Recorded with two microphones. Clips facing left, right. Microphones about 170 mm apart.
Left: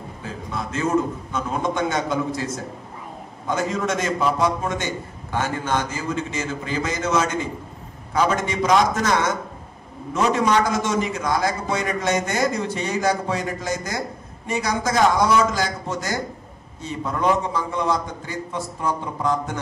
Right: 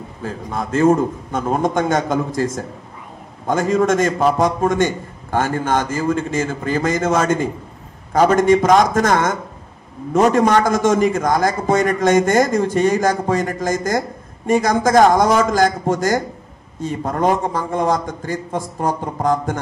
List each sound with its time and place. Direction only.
0.2 s a man's voice: 50° right (ahead or behind)